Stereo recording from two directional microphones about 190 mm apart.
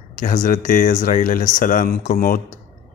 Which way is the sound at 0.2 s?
40° left (ahead or behind).